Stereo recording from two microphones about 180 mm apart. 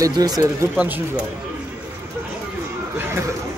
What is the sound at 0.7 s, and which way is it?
Speech, 10° right (ahead or behind).